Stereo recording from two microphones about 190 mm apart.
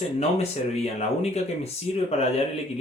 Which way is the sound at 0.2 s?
35° left (ahead or behind).